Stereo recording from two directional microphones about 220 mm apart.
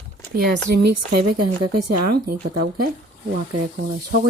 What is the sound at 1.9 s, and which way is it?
Speech, 40° right (ahead or behind).